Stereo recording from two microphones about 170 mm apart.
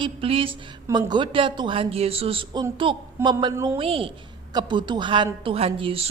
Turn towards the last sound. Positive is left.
turn(degrees=-35)  # may be behind; listen again after turning